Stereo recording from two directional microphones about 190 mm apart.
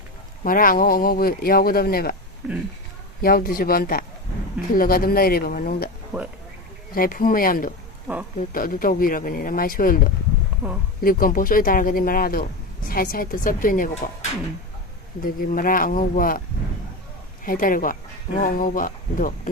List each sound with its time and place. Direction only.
0.4 s speech: 50° left (ahead or behind)
3.2 s speech: 50° left (ahead or behind)
6.1 s speech: 5° right (ahead or behind)
6.9 s speech: 50° left (ahead or behind)
8.1 s speech: 5° right (ahead or behind)
8.5 s speech: 50° left (ahead or behind)
11.0 s speech: 50° left (ahead or behind)
17.4 s speech: 45° left (ahead or behind)